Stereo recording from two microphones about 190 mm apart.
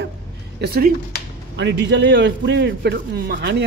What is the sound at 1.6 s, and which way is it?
A man's voice, 65° right (ahead or behind).